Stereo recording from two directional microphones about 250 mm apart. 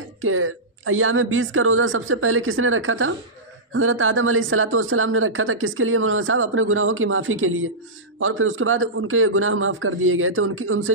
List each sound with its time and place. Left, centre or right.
0.2 s speech: right